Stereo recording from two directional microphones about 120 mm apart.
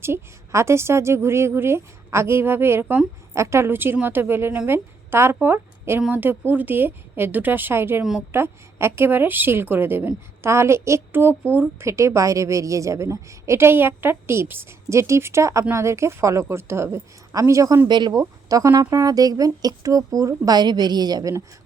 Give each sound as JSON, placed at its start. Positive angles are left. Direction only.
{"t": 0.0, "sound": "a woman's voice", "side_deg": -20}
{"t": 3.3, "sound": "a woman's voice", "side_deg": -25}